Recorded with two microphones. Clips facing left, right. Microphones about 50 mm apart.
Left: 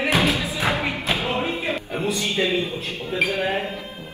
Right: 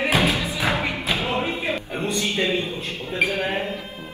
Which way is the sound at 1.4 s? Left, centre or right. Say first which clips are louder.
Even; centre.